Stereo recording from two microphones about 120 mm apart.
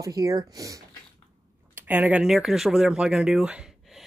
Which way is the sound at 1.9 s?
10° right (ahead or behind).